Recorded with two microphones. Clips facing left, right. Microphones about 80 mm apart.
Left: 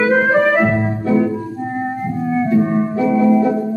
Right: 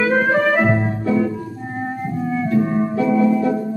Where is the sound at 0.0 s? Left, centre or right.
Centre.